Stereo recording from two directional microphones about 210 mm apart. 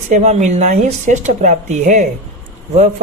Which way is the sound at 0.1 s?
35° right (ahead or behind).